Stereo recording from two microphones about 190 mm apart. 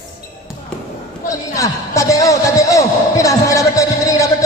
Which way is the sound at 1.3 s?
15° left (ahead or behind).